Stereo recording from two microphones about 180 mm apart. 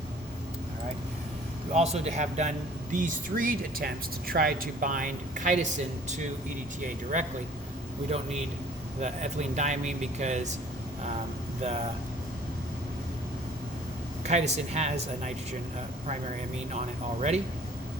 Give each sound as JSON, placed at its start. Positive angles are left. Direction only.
{"t": 1.7, "sound": "speech", "side_deg": -40}
{"t": 14.3, "sound": "speech", "side_deg": -40}
{"t": 16.7, "sound": "speech", "side_deg": -40}